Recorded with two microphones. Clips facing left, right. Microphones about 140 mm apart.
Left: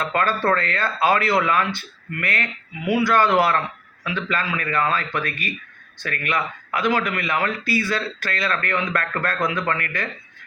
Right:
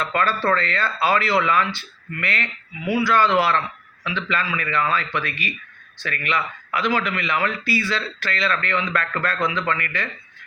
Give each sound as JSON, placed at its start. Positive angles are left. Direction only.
{"t": 0.0, "sound": "speech", "side_deg": 50}